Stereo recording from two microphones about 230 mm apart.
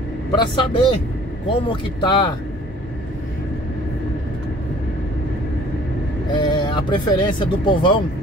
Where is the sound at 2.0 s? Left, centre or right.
Centre.